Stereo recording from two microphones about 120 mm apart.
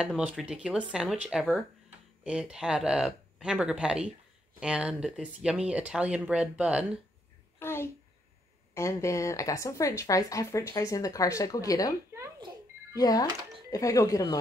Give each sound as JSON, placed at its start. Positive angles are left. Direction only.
{"t": 0.0, "sound": "speech", "side_deg": -5}
{"t": 7.5, "sound": "a sound", "side_deg": 20}
{"t": 8.7, "sound": "a woman's voice", "side_deg": 25}
{"t": 12.9, "sound": "a woman's voice", "side_deg": 30}